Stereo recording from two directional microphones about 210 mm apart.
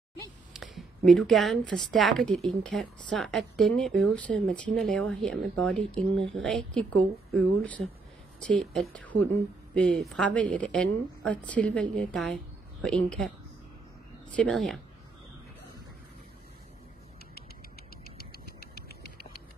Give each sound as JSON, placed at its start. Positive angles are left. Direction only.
{"t": 0.5, "sound": "a woman's voice", "side_deg": 0}
{"t": 14.3, "sound": "a woman's voice", "side_deg": 5}
{"t": 18.0, "sound": "a sound", "side_deg": 45}